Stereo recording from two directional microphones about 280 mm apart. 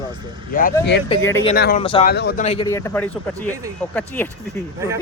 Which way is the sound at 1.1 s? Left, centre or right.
Centre.